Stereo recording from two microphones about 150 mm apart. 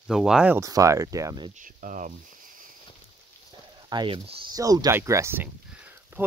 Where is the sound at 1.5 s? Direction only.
60° right (ahead or behind).